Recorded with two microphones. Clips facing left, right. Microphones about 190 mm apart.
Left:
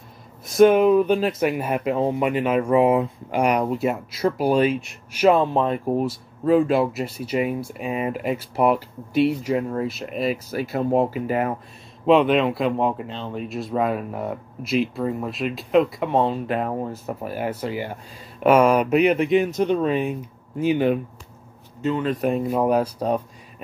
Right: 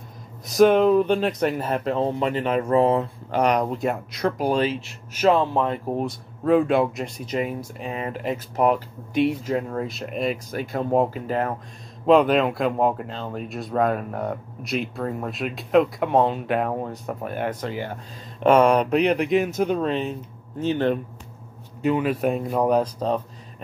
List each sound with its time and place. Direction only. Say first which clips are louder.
0.5 s speech: left 1 dB; centre (ahead or behind); by 5.8 s 20° left (ahead or behind)
5.9 s speech: left 3 dB; 5° left (ahead or behind)
19.9 s speech: left 3 dB; 10° left (ahead or behind)
21.8 s speech: right 1 dB; 10° right (ahead or behind); by 23.2 s 10° left (ahead or behind)